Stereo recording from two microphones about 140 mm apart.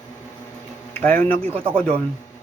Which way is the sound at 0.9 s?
10° left (ahead or behind).